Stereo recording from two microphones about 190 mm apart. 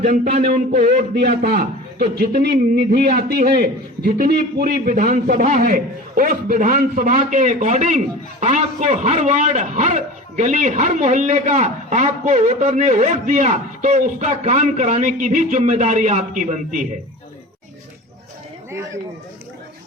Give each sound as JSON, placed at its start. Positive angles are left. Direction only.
{"t": 0.0, "sound": "a man's voice", "side_deg": -40}